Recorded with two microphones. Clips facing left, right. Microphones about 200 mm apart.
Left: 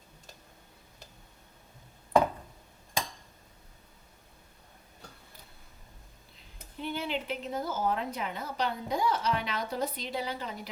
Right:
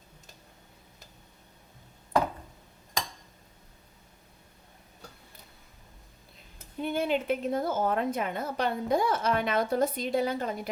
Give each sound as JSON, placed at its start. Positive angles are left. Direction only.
{"t": 6.7, "sound": "a woman's voice", "side_deg": -50}